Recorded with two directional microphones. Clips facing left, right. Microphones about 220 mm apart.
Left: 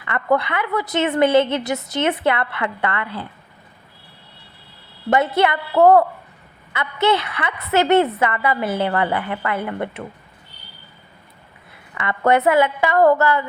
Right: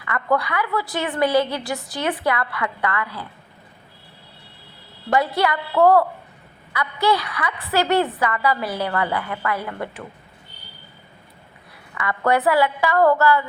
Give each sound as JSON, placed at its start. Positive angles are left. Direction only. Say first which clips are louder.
{"t": 0.0, "sound": "a woman's voice", "louder": "left 2 dB", "side_deg": 25}
{"t": 5.1, "sound": "a woman's voice", "louder": "left 3 dB", "side_deg": 20}
{"t": 11.9, "sound": "a woman's voice", "louder": "left 3 dB", "side_deg": 20}